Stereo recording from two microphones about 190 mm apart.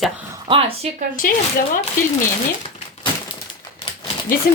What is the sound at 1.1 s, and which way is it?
Speech, 45° left (ahead or behind).